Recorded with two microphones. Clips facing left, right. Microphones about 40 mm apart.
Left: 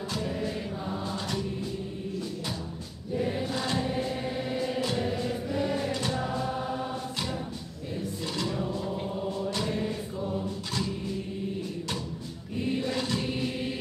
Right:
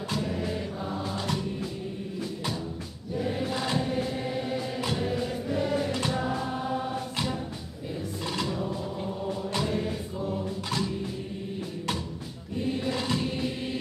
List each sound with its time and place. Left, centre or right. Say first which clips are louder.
0.1 s music: right 2 dB; centre
3.4 s choir: right 1 dB; centre
3.9 s music: right 1 dB; centre
6.0 s choir: right 1 dB; centre
9.6 s music: right 4 dB; centre